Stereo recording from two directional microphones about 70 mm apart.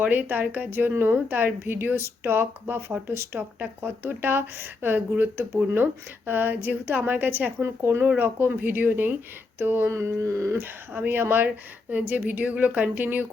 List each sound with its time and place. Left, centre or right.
0.0 s speech: right
7.6 s speech: right
9.9 s speech: right